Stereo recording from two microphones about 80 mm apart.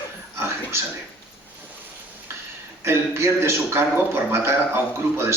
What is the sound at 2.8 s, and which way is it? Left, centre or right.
A man's voice, right.